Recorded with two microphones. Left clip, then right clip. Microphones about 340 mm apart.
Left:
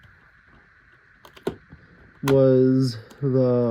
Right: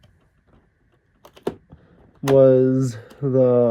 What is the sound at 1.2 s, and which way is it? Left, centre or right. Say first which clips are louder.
Computer keyboard: right 2 dB; centre.